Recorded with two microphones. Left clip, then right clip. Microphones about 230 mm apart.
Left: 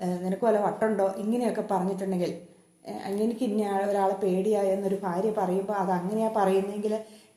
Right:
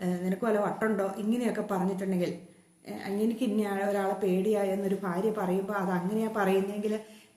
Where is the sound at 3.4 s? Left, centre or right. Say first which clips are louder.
Left 3 dB; centre.